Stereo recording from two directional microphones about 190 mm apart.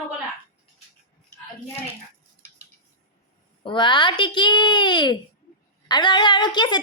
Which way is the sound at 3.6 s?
25° left (ahead or behind).